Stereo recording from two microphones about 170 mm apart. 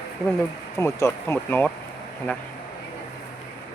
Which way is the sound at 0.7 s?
15° left (ahead or behind).